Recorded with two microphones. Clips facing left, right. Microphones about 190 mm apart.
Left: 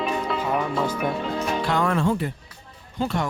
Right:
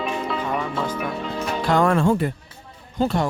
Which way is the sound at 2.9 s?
35° right (ahead or behind).